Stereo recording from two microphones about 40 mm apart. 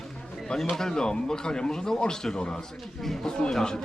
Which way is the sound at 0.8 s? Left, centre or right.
Centre.